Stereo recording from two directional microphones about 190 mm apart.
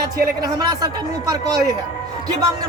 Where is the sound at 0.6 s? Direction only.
20° right (ahead or behind).